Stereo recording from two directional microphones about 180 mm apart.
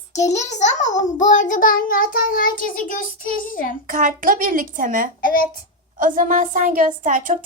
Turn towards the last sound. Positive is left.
turn(degrees=-45)  # may be behind; listen again after turning